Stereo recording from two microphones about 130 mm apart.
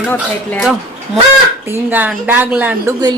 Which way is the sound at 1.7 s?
15° right (ahead or behind).